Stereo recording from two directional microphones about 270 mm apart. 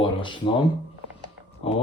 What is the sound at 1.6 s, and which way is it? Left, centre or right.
Speech, left.